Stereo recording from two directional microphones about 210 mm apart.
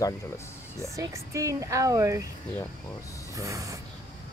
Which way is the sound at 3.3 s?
15° right (ahead or behind).